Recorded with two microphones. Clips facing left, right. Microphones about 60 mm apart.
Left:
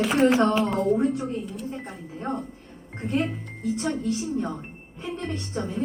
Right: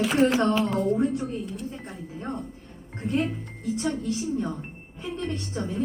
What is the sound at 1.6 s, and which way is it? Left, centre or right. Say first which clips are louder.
Speech: left 2 dB; left.